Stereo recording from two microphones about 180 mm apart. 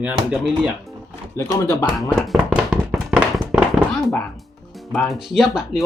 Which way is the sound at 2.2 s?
5° right (ahead or behind).